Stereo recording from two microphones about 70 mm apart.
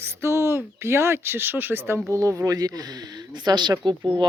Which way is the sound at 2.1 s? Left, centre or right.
Right.